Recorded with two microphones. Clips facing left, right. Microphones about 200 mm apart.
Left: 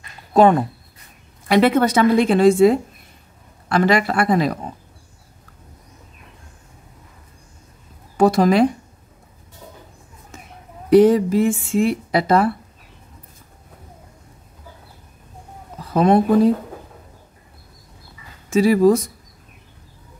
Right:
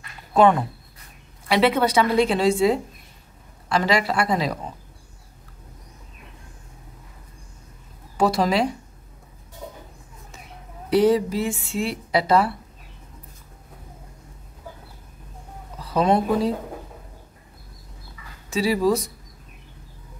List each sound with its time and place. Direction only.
0.3 s speech: 40° left (ahead or behind)
8.2 s speech: 50° left (ahead or behind)
10.9 s speech: 50° left (ahead or behind)
15.8 s speech: 50° left (ahead or behind)
18.5 s speech: 50° left (ahead or behind)